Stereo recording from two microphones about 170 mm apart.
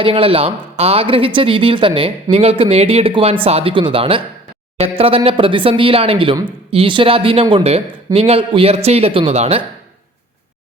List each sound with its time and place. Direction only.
0.0 s speech: 30° right (ahead or behind)